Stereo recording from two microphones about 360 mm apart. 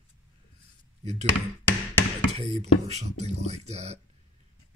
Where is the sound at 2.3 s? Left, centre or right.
Centre.